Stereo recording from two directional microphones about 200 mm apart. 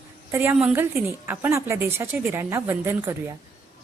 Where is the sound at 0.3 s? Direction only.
10° right (ahead or behind).